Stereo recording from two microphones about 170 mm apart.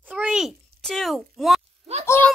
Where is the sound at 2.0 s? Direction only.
15° left (ahead or behind).